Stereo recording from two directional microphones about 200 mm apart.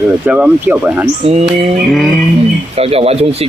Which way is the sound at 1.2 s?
30° right (ahead or behind).